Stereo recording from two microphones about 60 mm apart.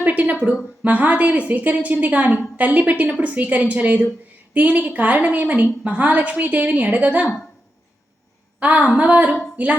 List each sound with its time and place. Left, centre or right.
0.0 s a woman's voice: right
8.5 s a woman's voice: right
9.3 s female singing: right